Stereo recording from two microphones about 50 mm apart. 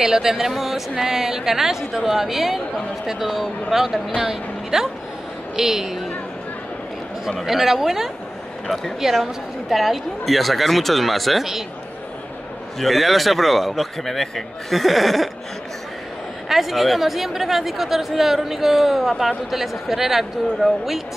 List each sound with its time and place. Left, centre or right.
0.0 s a woman's voice: centre
7.2 s speech: centre
12.7 s speech: centre
16.4 s speech: centre